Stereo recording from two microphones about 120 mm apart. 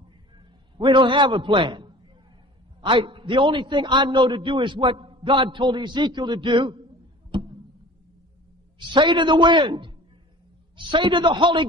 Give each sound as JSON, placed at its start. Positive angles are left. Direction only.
{"t": 0.7, "sound": "a man's voice", "side_deg": -40}
{"t": 7.3, "sound": "music", "side_deg": -40}
{"t": 8.7, "sound": "a man's voice", "side_deg": -40}